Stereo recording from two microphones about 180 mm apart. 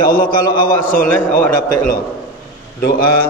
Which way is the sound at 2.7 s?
55° left (ahead or behind).